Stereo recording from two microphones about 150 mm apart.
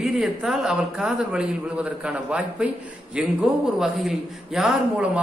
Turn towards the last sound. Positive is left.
turn(degrees=-5)  # may be behind; listen again after turning